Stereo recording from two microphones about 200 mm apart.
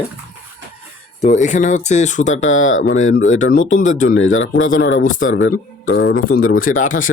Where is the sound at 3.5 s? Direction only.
40° left (ahead or behind).